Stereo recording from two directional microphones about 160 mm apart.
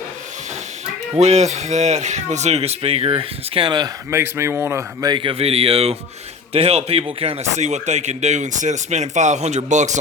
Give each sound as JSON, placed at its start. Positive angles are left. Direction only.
{"t": 1.1, "sound": "speech", "side_deg": -45}
{"t": 4.1, "sound": "a man's voice", "side_deg": -15}